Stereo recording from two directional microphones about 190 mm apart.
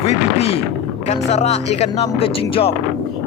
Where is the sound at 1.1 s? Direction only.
35° left (ahead or behind).